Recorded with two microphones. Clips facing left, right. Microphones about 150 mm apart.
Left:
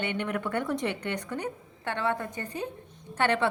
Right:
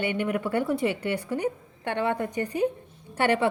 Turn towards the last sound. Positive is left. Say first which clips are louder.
# right 3 dB
turn(degrees=-10)  # may be behind; listen again after turning